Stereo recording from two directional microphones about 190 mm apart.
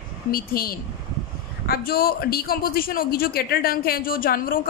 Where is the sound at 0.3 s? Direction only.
50° left (ahead or behind).